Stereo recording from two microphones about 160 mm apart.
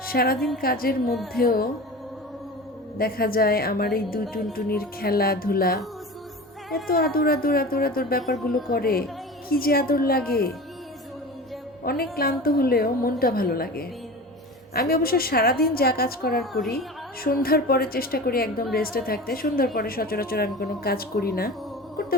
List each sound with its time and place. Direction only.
0.0 s a woman's voice: 70° left (ahead or behind)
1.3 s music: 65° left (ahead or behind)
3.0 s a woman's voice: 70° left (ahead or behind)
6.8 s a woman's voice: 70° left (ahead or behind)
11.8 s a woman's voice: 70° left (ahead or behind)
16.4 s a woman's voice: centre (ahead or behind)
17.2 s a woman's voice: 70° left (ahead or behind)